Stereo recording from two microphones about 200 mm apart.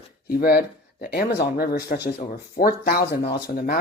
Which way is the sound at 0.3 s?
50° left (ahead or behind).